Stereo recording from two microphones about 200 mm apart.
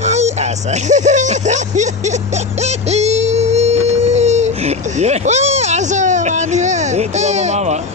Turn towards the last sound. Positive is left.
turn(degrees=-35)  # may be behind; listen again after turning